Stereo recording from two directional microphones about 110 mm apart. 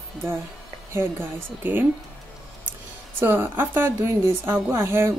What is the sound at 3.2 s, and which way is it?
A woman's voice, 20° right (ahead or behind).